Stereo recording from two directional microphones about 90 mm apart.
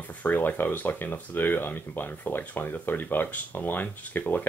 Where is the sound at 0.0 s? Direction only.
20° left (ahead or behind).